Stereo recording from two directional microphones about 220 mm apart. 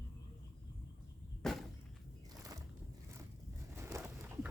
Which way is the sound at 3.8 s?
15° right (ahead or behind).